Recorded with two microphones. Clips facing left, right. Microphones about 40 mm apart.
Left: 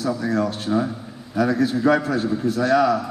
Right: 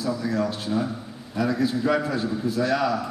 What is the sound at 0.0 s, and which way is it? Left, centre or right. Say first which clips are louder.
Speech: left 3 dB; left.